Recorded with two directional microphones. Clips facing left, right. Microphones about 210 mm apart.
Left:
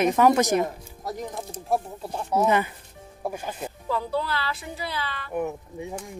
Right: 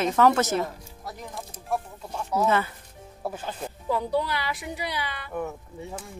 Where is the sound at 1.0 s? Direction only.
35° left (ahead or behind).